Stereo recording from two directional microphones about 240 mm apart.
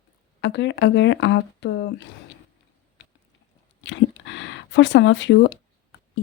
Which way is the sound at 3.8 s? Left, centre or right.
Left.